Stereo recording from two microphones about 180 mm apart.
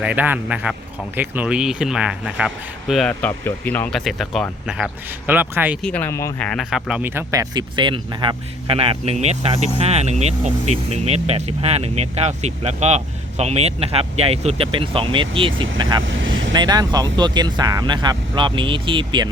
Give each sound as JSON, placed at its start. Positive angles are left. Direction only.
{"t": 0.0, "sound": "speech", "side_deg": -10}
{"t": 5.2, "sound": "speech", "side_deg": -10}
{"t": 5.8, "sound": "speech", "side_deg": 10}
{"t": 6.5, "sound": "speech", "side_deg": 0}
{"t": 16.0, "sound": "vehicle", "side_deg": -90}
{"t": 16.5, "sound": "speech", "side_deg": -25}